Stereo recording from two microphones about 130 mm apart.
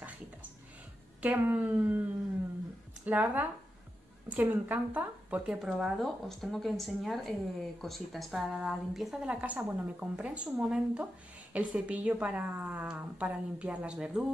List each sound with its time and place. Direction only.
1.2 s a woman's voice: 10° right (ahead or behind)
3.1 s a woman's voice: 10° right (ahead or behind)